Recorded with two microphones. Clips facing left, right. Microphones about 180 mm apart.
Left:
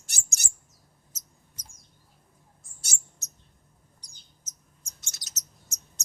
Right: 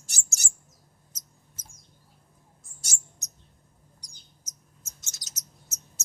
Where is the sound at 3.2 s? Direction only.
15° right (ahead or behind).